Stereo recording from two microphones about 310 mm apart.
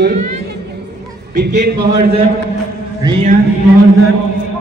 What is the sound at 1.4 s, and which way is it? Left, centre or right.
Speech, right.